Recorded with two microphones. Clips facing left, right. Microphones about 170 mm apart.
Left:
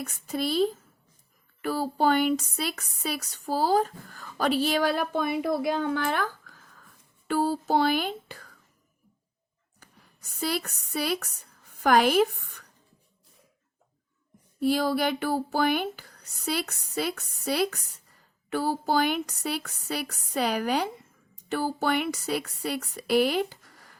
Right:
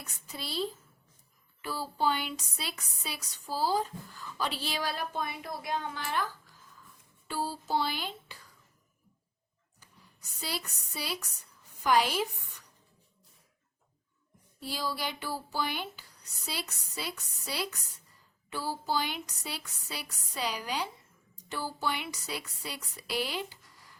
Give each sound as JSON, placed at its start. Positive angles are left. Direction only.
{"t": 0.0, "sound": "speech", "side_deg": 50}
{"t": 7.3, "sound": "speech", "side_deg": 55}
{"t": 10.9, "sound": "a woman's voice", "side_deg": 55}
{"t": 14.6, "sound": "speech", "side_deg": 55}
{"t": 23.6, "sound": "a sound", "side_deg": 55}